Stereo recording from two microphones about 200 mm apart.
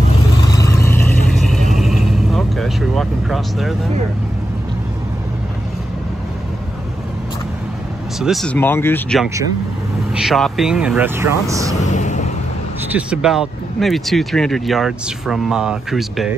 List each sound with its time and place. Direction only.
0.5 s vehicle: 15° left (ahead or behind)
1.3 s vehicle: centre (ahead or behind)
8.2 s speech: centre (ahead or behind)
10.1 s speech: centre (ahead or behind)
11.8 s vehicle: 35° left (ahead or behind)
12.9 s speech: 5° right (ahead or behind)